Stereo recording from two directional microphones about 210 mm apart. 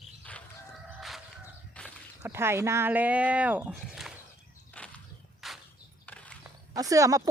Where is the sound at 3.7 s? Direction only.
Centre (ahead or behind).